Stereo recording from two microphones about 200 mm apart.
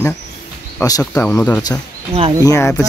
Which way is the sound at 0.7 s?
20° left (ahead or behind).